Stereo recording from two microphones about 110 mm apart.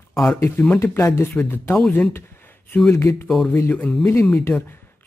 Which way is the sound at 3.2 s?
5° left (ahead or behind).